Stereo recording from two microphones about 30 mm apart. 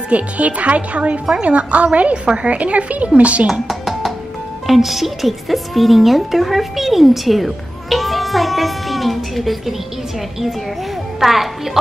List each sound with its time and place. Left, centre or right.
0.1 s speech: right
3.6 s music: centre
4.6 s speech: centre
11.1 s a child's voice: centre